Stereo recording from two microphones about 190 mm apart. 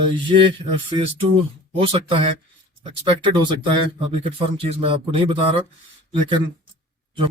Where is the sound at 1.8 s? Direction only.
30° right (ahead or behind).